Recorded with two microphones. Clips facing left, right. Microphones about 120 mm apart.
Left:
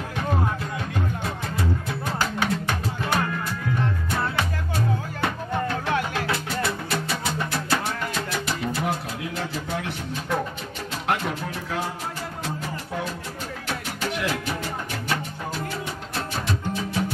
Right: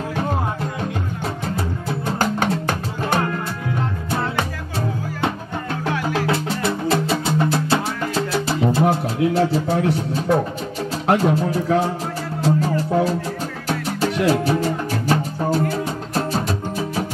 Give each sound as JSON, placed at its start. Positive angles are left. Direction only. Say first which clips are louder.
{"t": 2.1, "sound": "music", "louder": "right 4 dB", "side_deg": -45}
{"t": 2.7, "sound": "music", "louder": "right 4 dB", "side_deg": -30}
{"t": 6.2, "sound": "music", "louder": "right 5 dB", "side_deg": -25}